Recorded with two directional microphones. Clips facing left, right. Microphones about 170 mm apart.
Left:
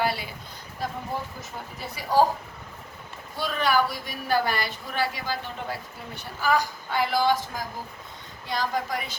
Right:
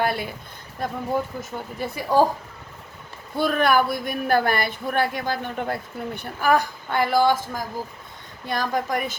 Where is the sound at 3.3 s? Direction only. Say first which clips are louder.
Right 5 dB; 55° right (ahead or behind).